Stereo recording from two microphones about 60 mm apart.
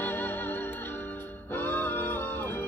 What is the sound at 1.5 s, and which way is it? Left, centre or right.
Music, left.